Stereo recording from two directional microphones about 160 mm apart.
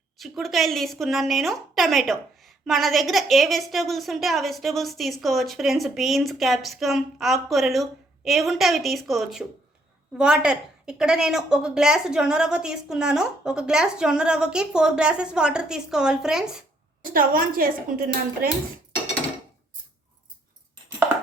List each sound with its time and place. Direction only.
0.2 s a woman's voice: centre (ahead or behind)
17.1 s a woman's voice: 60° right (ahead or behind)